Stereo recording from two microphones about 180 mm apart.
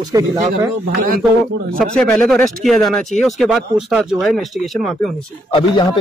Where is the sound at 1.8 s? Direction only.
5° left (ahead or behind).